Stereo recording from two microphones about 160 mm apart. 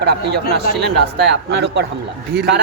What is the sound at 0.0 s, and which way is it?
Speech, 90° right.